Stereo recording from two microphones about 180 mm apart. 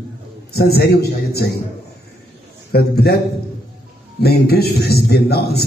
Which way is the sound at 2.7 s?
60° left (ahead or behind).